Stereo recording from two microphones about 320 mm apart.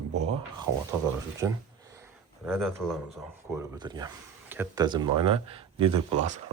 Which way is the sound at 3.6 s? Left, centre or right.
Centre.